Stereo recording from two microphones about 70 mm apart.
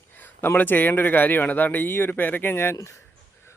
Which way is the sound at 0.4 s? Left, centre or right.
Left.